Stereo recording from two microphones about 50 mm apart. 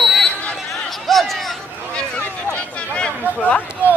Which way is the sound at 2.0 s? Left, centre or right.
Left.